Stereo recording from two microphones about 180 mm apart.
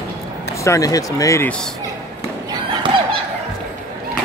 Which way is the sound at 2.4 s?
25° right (ahead or behind).